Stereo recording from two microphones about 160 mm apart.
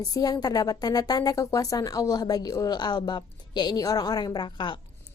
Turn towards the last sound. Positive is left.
turn(degrees=30)  # may be behind; listen again after turning